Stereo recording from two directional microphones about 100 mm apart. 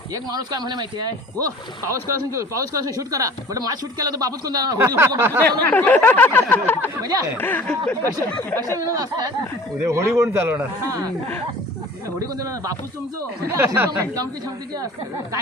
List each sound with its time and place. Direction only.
0.1 s speech: 40° right (ahead or behind)
4.9 s speech: 25° right (ahead or behind)
5.4 s speech: 15° left (ahead or behind)
7.0 s speech: 40° right (ahead or behind)
7.3 s speech: 20° left (ahead or behind)
8.0 s speech: 25° left (ahead or behind)
8.8 s speech: 35° right (ahead or behind)
10.8 s speech: 35° right (ahead or behind)
12.4 s speech: 35° right (ahead or behind)
13.5 s speech: 20° right (ahead or behind)